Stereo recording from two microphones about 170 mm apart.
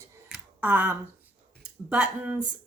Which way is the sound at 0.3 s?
5° right (ahead or behind).